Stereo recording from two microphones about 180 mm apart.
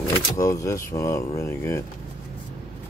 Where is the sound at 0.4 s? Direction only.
20° left (ahead or behind).